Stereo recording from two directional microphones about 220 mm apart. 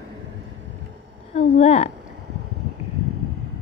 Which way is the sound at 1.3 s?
30° left (ahead or behind).